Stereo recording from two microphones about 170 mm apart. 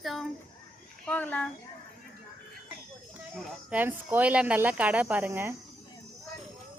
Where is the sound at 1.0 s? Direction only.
10° left (ahead or behind).